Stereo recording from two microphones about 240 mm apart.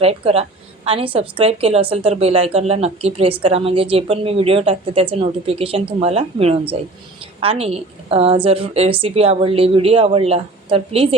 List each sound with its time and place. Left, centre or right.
0.0 s a woman's voice: right